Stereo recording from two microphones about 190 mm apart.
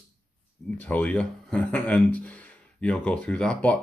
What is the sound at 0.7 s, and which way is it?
Speech, 10° left (ahead or behind).